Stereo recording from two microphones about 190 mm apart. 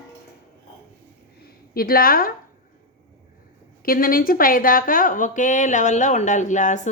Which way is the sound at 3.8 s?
50° left (ahead or behind).